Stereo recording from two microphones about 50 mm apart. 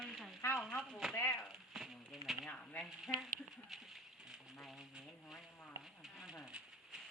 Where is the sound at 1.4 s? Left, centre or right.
Centre.